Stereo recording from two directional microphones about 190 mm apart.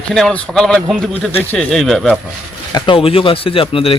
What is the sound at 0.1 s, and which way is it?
Speech, 5° left (ahead or behind).